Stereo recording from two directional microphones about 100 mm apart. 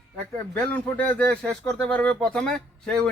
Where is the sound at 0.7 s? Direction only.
15° left (ahead or behind).